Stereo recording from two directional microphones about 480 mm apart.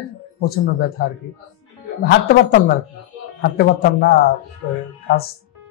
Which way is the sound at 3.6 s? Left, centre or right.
Centre.